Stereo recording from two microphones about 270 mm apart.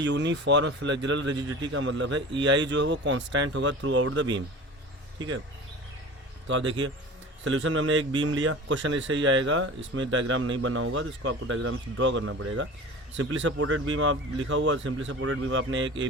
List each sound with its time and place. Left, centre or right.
0.0 s a man's voice: right
6.5 s a man's voice: right